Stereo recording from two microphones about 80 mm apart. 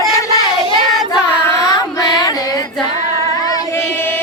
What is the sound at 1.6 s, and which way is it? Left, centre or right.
Female singing, left.